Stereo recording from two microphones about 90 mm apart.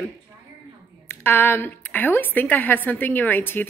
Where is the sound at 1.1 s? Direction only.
25° left (ahead or behind).